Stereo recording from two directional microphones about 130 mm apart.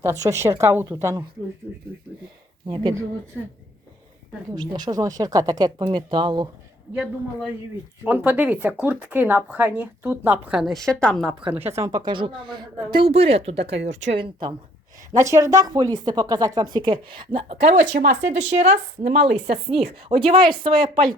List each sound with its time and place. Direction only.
0.0 s a woman's voice: 25° right (ahead or behind)
2.6 s a woman's voice: 40° right (ahead or behind)
4.5 s speech: 35° right (ahead or behind)
8.0 s speech: 10° right (ahead or behind); by 11.3 s 5° left (ahead or behind)
11.6 s a woman's voice: 20° right (ahead or behind); by 14.2 s 60° right (ahead or behind)
14.2 s speech: 40° right (ahead or behind)
15.1 s speech: 25° right (ahead or behind); by 21.1 s 45° right (ahead or behind)